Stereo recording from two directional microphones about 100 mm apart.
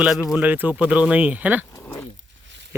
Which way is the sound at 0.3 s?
15° right (ahead or behind).